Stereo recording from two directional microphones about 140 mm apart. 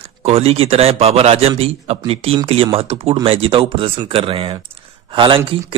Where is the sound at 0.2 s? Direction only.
45° right (ahead or behind).